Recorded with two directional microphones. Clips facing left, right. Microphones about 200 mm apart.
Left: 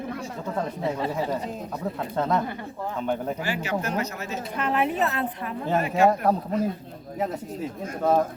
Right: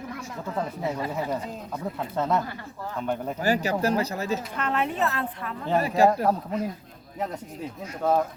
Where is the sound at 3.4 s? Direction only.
40° right (ahead or behind).